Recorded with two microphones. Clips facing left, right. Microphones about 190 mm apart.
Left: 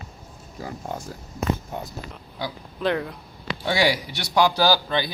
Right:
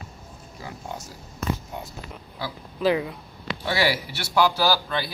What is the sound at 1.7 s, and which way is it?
Speech, 50° left (ahead or behind).